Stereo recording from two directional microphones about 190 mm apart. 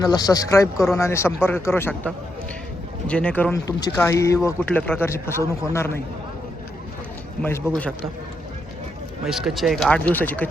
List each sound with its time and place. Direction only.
0.0 s speech: 20° left (ahead or behind)
3.1 s speech: 5° left (ahead or behind)
9.2 s speech: centre (ahead or behind)